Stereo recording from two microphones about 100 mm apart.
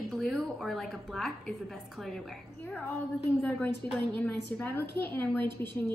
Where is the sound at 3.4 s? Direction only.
20° left (ahead or behind).